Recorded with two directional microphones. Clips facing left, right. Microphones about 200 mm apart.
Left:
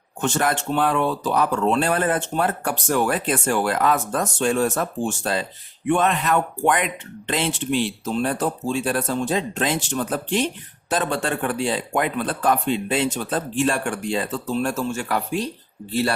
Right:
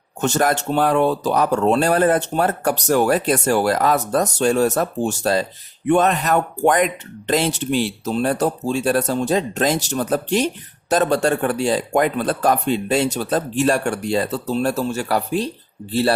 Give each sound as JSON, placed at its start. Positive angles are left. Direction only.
{"t": 0.2, "sound": "speech", "side_deg": -40}